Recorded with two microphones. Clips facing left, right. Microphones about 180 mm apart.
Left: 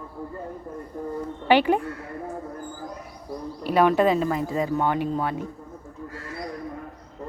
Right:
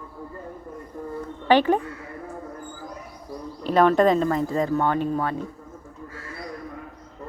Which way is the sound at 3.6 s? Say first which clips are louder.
Right 2 dB; 10° left (ahead or behind).